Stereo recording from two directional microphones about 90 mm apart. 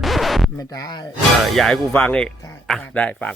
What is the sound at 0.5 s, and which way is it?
Speech, 50° left (ahead or behind).